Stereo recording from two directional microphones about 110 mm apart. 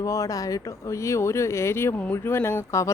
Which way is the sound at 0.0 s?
30° left (ahead or behind).